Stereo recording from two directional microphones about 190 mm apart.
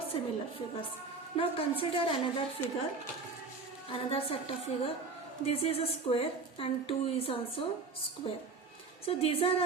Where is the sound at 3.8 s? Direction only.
30° left (ahead or behind).